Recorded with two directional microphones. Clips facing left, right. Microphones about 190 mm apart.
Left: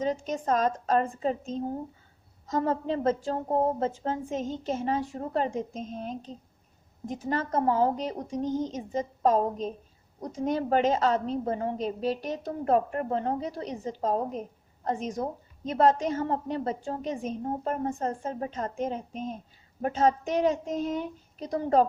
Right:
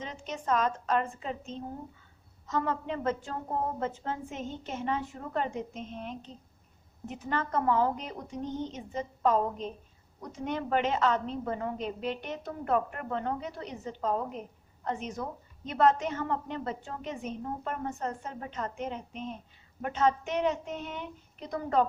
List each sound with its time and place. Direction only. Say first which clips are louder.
0.0 s a woman's voice: left 9 dB; 40° left (ahead or behind)